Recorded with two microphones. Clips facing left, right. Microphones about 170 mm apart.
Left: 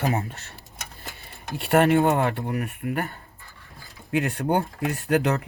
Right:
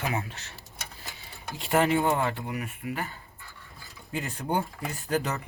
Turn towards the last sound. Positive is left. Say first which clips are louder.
# left 7 dB
turn(degrees=65)  # may be behind; listen again after turning